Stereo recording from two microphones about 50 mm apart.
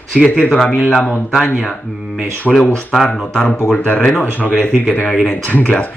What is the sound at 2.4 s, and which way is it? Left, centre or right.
Speech, left.